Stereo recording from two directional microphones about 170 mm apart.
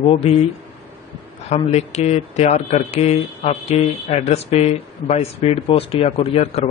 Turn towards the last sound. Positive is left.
turn(degrees=35)  # may be behind; listen again after turning